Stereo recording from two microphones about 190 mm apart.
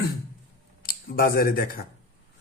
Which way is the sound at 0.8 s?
50° left (ahead or behind).